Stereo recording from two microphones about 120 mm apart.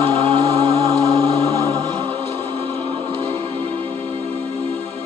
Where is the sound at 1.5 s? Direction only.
40° right (ahead or behind).